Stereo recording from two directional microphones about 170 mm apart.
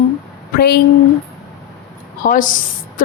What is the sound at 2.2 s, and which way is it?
Speech, 50° left (ahead or behind).